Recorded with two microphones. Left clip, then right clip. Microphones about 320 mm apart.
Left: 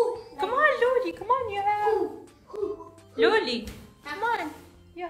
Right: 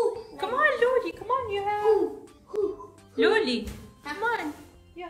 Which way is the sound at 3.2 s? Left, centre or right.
Centre.